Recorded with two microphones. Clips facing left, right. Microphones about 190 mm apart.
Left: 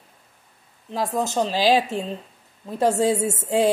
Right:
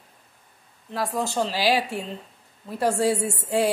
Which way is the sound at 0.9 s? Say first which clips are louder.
Left 3 dB; 20° left (ahead or behind).